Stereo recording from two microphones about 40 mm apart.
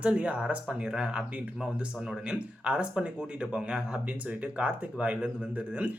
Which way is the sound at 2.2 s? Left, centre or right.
Right.